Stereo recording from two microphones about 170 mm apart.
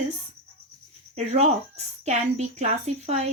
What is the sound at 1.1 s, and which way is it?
Speech, 40° right (ahead or behind).